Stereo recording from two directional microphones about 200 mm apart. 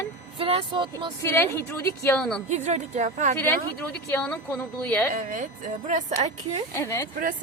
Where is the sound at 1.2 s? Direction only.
15° left (ahead or behind).